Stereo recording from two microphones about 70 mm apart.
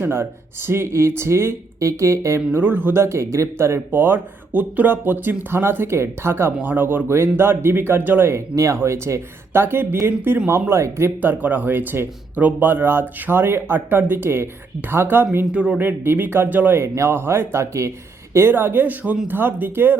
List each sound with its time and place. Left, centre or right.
0.0 s speech: right
2.5 s speech: right
3.0 s speech: right
9.5 s speech: right
10.5 s speech: right
11.2 s speech: right
15.5 s speech: centre
15.8 s speech: right
16.8 s speech: right
18.3 s speech: right